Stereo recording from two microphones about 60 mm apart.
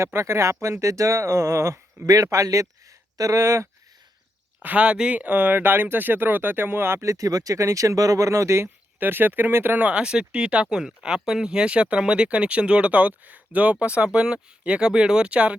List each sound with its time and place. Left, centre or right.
0.0 s speech: right
2.0 s speech: right
4.6 s speech: right
9.0 s speech: right
9.7 s speech: right